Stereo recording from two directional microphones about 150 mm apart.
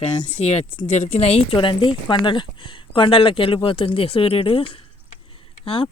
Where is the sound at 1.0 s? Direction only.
45° left (ahead or behind).